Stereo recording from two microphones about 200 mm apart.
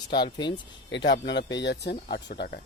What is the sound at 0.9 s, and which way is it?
Speech, 65° left (ahead or behind).